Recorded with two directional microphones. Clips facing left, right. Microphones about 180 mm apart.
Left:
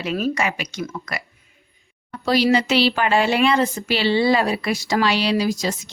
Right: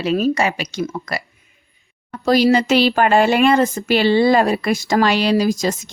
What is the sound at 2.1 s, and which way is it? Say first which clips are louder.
Speech: right 4 dB; 45° right (ahead or behind).